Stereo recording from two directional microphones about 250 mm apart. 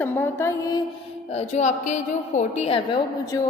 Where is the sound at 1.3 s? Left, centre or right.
Left.